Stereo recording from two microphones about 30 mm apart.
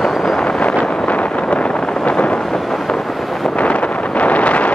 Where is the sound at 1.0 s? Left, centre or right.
Left.